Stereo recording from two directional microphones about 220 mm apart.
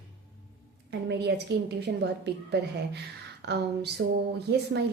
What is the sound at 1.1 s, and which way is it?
A woman's voice, 50° right (ahead or behind).